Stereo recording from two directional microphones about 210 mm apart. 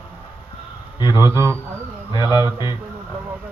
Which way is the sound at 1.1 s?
15° right (ahead or behind).